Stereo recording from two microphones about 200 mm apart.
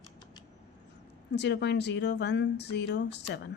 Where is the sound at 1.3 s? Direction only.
60° left (ahead or behind).